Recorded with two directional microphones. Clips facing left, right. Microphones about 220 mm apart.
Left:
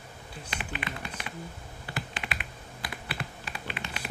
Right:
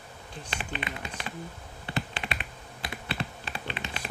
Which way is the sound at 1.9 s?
30° right (ahead or behind).